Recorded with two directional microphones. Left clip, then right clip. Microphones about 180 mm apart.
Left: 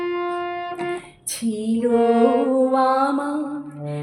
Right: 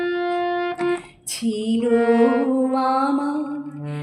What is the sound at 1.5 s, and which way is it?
Mantra, 70° left (ahead or behind).